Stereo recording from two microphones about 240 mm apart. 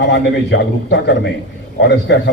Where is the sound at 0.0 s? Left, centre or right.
Left.